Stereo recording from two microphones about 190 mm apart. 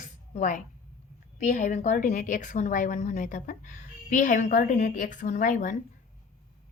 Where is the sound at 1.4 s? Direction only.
40° left (ahead or behind).